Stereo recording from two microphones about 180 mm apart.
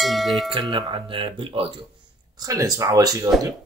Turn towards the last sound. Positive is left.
turn(degrees=-20)  # may be behind; listen again after turning